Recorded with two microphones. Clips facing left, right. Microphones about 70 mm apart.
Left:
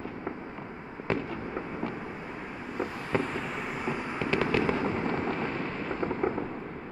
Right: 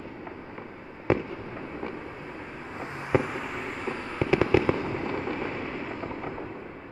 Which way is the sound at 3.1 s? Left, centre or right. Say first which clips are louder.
Right 6 dB; centre.